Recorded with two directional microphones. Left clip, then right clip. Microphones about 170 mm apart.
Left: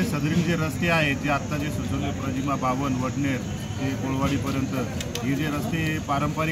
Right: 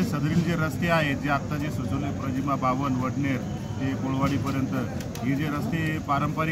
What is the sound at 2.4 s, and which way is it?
Speech, 5° left (ahead or behind).